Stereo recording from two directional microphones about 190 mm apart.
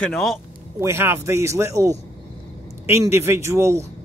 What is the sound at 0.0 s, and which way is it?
Speech, centre (ahead or behind).